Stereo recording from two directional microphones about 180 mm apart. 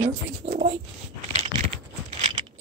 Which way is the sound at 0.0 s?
45° right (ahead or behind).